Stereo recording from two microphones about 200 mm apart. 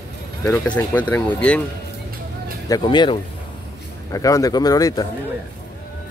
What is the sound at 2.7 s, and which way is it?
Speech, 20° left (ahead or behind).